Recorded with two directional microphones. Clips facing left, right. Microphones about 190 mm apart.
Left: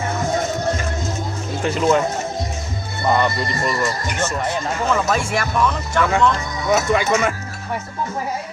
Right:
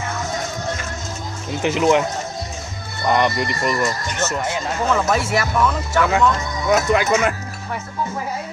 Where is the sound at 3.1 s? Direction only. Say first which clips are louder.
Right 3 dB; 15° right (ahead or behind).